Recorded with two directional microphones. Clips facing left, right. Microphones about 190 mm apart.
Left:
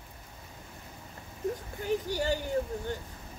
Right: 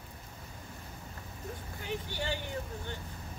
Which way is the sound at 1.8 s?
40° left (ahead or behind).